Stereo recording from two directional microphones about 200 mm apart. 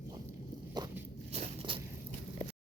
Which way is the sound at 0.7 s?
20° right (ahead or behind).